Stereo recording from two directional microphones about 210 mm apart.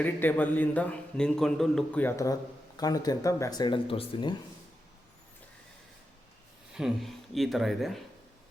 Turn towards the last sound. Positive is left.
turn(degrees=0)  # may be behind; listen again after turning